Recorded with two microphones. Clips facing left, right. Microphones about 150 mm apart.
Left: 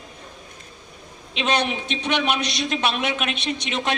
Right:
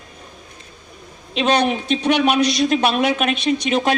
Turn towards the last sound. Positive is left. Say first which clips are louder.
# right 8 dB
turn(degrees=-45)  # may be behind; listen again after turning